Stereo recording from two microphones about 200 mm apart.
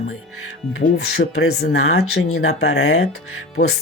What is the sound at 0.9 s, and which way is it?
Speech, 55° left (ahead or behind).